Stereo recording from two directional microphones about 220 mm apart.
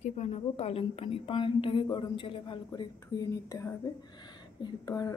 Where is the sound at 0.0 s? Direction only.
30° left (ahead or behind).